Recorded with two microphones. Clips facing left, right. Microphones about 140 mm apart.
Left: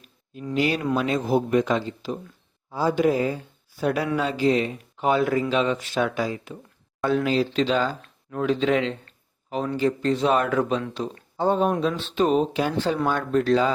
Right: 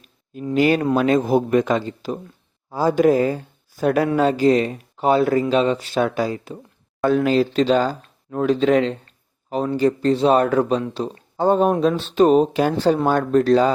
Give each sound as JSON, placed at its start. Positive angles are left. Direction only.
{"t": 0.5, "sound": "speech", "side_deg": -50}
{"t": 7.0, "sound": "speech", "side_deg": -45}
{"t": 11.3, "sound": "speech", "side_deg": -45}